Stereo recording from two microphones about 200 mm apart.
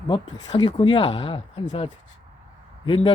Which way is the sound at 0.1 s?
20° left (ahead or behind).